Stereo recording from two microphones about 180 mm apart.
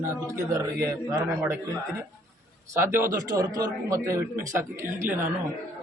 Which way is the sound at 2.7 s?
15° right (ahead or behind).